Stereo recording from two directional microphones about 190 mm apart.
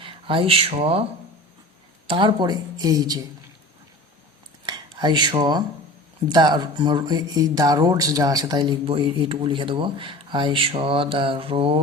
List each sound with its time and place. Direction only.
0.0 s speech: 30° right (ahead or behind)
2.0 s speech: 25° right (ahead or behind)
4.6 s speech: 25° right (ahead or behind)